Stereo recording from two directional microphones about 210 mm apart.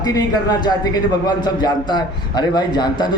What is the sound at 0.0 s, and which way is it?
A man's voice, 20° left (ahead or behind).